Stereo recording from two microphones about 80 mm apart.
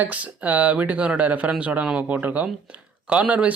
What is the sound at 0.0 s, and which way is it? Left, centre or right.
A man's voice, centre.